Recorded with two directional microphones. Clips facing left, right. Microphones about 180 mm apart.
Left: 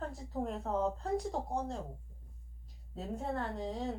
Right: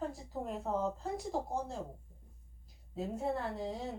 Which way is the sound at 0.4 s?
5° right (ahead or behind).